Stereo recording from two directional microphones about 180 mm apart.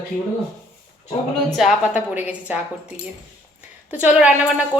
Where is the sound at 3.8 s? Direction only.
10° right (ahead or behind).